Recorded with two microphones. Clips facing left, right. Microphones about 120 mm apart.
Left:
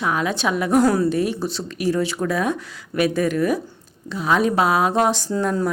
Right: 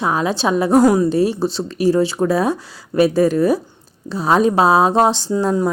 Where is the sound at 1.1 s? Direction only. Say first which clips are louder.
Right 5 dB; 30° right (ahead or behind).